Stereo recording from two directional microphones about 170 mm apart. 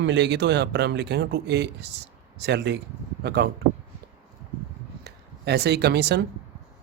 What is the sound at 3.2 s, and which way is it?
Speech, 75° right (ahead or behind).